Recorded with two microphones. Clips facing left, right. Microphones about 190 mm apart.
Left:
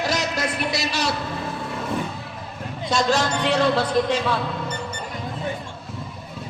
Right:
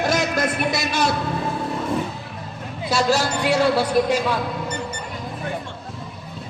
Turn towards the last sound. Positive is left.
turn(degrees=-10)  # may be behind; listen again after turning